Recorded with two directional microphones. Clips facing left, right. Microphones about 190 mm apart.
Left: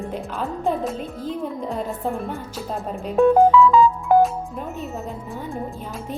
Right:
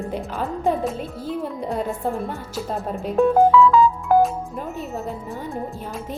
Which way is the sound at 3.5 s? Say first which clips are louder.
Even; 15° left (ahead or behind).